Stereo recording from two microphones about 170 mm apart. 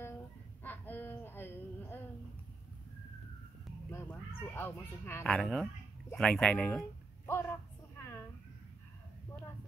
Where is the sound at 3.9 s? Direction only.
15° left (ahead or behind).